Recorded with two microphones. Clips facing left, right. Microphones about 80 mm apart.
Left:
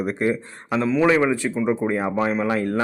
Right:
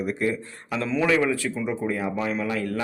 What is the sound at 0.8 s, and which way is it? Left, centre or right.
Speech, centre.